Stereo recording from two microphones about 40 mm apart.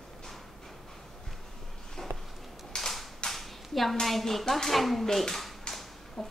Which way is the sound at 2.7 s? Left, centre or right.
Centre.